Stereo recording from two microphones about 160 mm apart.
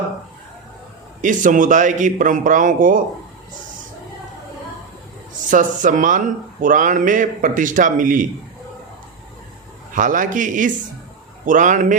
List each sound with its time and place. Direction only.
1.2 s a man's voice: 55° right (ahead or behind)
5.5 s speech: 55° right (ahead or behind)
9.9 s a man's voice: 55° right (ahead or behind)